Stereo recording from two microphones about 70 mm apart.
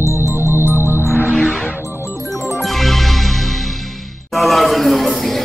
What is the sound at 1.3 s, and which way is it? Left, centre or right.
Music, centre.